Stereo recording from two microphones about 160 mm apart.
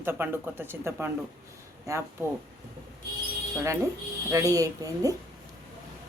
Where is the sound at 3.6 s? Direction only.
20° right (ahead or behind).